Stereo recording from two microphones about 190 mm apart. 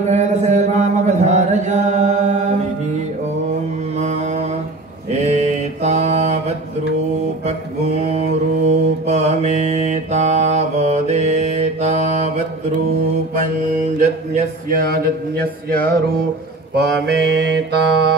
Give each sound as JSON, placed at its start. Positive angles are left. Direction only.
{"t": 0.0, "sound": "chant", "side_deg": -35}
{"t": 4.0, "sound": "mantra", "side_deg": -35}
{"t": 8.0, "sound": "mantra", "side_deg": -35}
{"t": 13.9, "sound": "a sound", "side_deg": -40}
{"t": 16.7, "sound": "mantra", "side_deg": -60}